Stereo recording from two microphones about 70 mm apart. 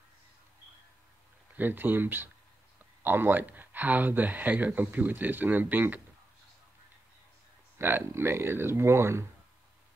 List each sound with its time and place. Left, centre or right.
1.6 s speech: right
7.8 s speech: right